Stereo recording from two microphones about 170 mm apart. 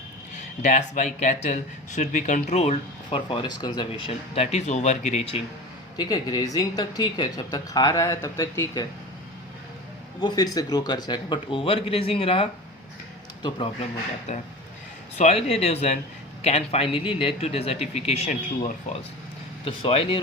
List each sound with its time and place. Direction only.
0.6 s speech: 45° left (ahead or behind)
6.0 s speech: 20° left (ahead or behind)
10.2 s a man's voice: 25° left (ahead or behind)